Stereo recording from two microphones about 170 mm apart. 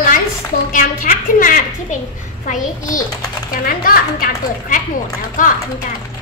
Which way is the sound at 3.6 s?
55° left (ahead or behind).